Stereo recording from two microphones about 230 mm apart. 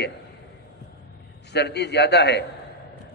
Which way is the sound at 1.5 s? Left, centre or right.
Left.